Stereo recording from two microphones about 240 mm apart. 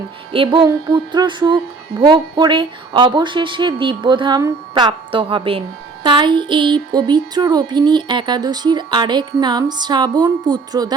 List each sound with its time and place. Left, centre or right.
0.3 s music: centre
2.0 s speech: centre